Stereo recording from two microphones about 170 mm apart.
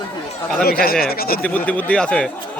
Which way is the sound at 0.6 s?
60° left (ahead or behind).